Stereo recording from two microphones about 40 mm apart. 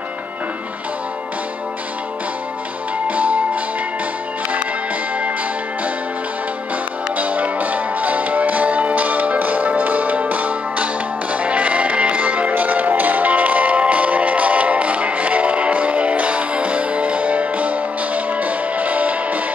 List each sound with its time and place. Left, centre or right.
3.1 s music: right
7.2 s music: right